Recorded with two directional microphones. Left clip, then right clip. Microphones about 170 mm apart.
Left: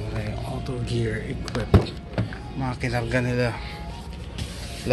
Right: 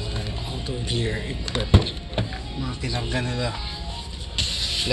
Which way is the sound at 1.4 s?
60° left (ahead or behind).